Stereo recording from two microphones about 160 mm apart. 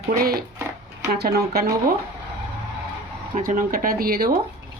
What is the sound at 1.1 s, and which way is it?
Speech, 75° right (ahead or behind).